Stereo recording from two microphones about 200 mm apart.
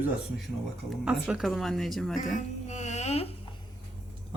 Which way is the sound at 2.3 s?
35° left (ahead or behind).